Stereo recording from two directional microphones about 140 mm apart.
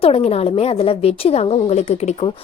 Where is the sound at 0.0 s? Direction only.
45° left (ahead or behind).